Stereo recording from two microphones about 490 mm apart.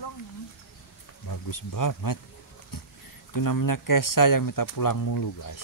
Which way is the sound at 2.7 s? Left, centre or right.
Left.